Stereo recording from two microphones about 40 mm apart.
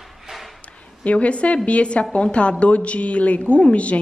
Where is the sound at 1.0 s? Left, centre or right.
Left.